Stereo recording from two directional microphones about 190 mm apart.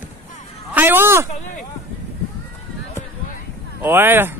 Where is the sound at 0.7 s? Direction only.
10° right (ahead or behind).